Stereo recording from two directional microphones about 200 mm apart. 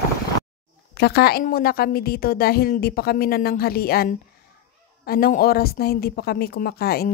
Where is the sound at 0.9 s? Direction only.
55° left (ahead or behind).